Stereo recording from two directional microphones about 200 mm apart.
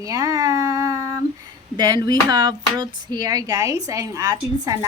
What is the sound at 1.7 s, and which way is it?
A woman's voice, 20° right (ahead or behind).